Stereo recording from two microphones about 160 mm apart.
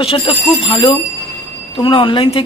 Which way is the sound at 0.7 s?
30° left (ahead or behind).